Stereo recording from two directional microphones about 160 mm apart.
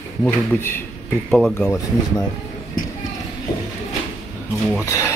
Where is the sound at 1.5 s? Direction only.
15° left (ahead or behind).